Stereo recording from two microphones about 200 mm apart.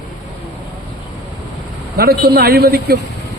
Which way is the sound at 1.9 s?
50° right (ahead or behind).